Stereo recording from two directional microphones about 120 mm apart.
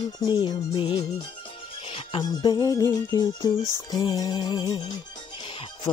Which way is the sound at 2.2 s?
35° left (ahead or behind).